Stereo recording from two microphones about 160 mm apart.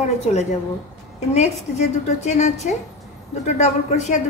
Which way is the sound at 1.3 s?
45° left (ahead or behind).